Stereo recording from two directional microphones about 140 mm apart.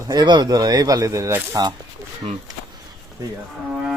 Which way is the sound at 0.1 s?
30° right (ahead or behind).